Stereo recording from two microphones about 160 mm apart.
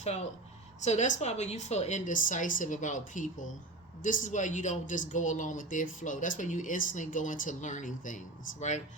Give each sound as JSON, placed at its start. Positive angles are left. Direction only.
{"t": 0.8, "sound": "speech", "side_deg": 45}